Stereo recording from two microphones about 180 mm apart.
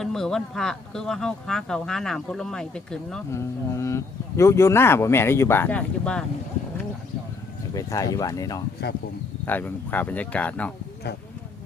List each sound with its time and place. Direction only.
0.0 s speech: 5° left (ahead or behind)
3.3 s speech: 15° left (ahead or behind)
7.7 s speech: 20° left (ahead or behind)